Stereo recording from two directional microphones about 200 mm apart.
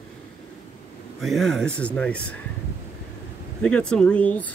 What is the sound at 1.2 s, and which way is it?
Speech, centre (ahead or behind).